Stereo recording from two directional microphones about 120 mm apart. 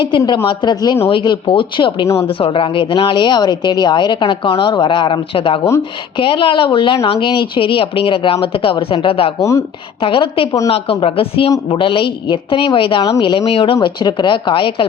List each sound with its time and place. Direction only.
0.4 s a woman's voice: 40° left (ahead or behind)
9.4 s speech: 25° left (ahead or behind)
10.0 s speech: 45° left (ahead or behind)
13.8 s speech: 40° left (ahead or behind)